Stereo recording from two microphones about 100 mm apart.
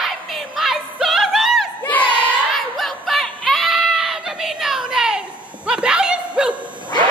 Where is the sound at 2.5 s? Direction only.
Centre (ahead or behind).